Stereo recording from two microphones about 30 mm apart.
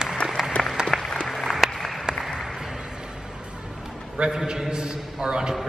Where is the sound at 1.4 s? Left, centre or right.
Centre.